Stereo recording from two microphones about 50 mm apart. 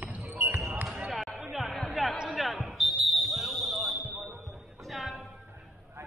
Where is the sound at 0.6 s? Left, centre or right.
Right.